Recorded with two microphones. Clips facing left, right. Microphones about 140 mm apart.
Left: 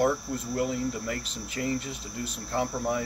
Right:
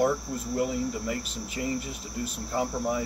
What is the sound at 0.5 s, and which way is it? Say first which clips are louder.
Speech: right 1 dB; 10° right (ahead or behind).